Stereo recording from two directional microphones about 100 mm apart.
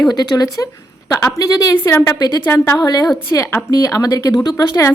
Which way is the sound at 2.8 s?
45° left (ahead or behind).